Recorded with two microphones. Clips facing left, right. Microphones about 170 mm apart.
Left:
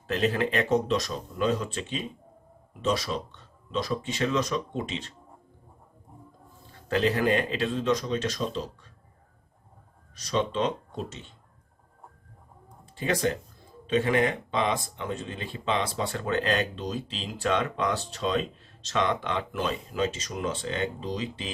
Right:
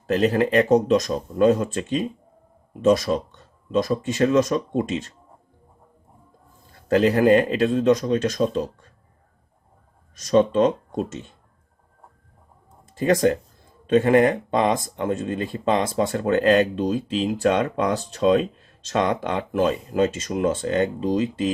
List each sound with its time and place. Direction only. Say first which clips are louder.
0.1 s speech: right 7 dB; 40° right (ahead or behind)
6.8 s speech: right 8 dB; 45° right (ahead or behind)
10.2 s speech: right 10 dB; 45° right (ahead or behind)
13.0 s speech: right 8 dB; 45° right (ahead or behind)